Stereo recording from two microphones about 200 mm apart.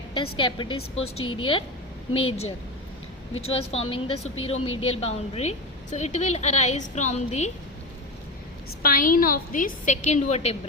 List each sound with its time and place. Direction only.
0.1 s a woman's voice: 25° left (ahead or behind)
8.8 s a woman's voice: 45° left (ahead or behind)